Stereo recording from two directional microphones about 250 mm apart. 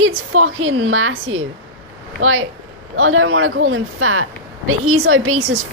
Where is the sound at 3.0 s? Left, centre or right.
Right.